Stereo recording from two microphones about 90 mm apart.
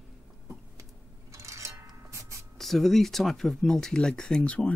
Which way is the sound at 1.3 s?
35° right (ahead or behind).